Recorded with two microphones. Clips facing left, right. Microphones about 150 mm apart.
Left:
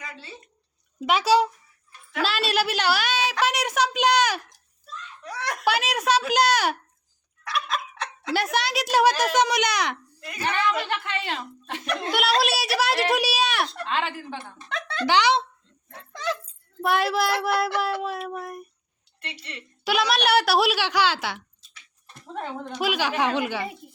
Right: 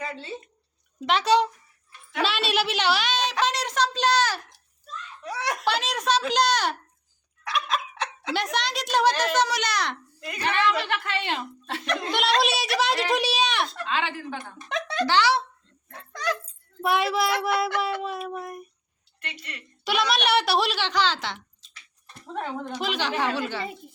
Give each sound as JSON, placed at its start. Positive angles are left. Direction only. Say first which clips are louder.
{"t": 0.0, "sound": "a sound", "louder": "right 7 dB", "side_deg": -25}
{"t": 1.0, "sound": "a woman's voice", "louder": "left 1 dB", "side_deg": 5}
{"t": 5.2, "sound": "snicker", "louder": "right 2 dB", "side_deg": 0}
{"t": 5.6, "sound": "a woman's voice", "louder": "left 3 dB", "side_deg": 10}
{"t": 10.2, "sound": "a woman's voice", "louder": "right 2 dB", "side_deg": 0}
{"t": 10.4, "sound": "a woman's voice", "louder": "right 1 dB", "side_deg": 20}
{"t": 14.3, "sound": "a woman's voice", "louder": "right 1 dB", "side_deg": 25}
{"t": 14.7, "sound": "speech", "louder": "right 4 dB", "side_deg": -15}
{"t": 15.0, "sound": "a woman's voice", "louder": "left 2 dB", "side_deg": 15}
{"t": 16.8, "sound": "a woman's voice", "louder": "left 1 dB", "side_deg": 0}
{"t": 19.2, "sound": "a woman's voice", "louder": "left 1 dB", "side_deg": 30}
{"t": 19.8, "sound": "a woman's voice", "louder": "left 2 dB", "side_deg": 0}